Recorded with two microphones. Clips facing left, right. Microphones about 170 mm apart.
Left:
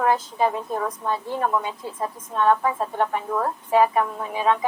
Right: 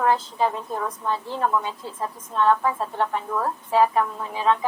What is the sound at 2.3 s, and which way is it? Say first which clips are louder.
Speech: even; 50° left (ahead or behind).